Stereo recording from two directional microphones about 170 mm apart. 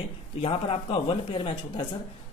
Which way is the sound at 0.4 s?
35° left (ahead or behind).